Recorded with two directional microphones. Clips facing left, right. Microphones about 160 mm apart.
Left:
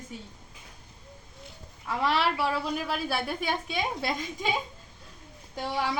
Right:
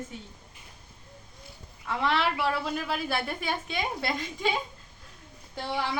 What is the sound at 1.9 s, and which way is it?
Speech, 10° left (ahead or behind).